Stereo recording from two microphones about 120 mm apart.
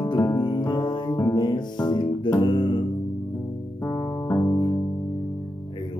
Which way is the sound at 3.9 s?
20° left (ahead or behind).